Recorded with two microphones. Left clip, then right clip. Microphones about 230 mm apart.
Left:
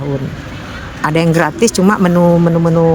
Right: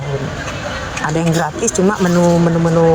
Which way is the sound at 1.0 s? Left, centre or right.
Left.